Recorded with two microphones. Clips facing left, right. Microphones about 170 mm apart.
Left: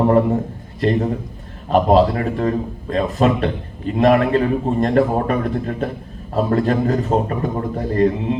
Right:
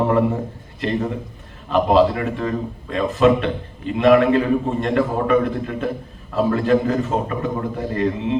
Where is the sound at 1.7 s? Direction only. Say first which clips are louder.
Left 2 dB; 40° left (ahead or behind).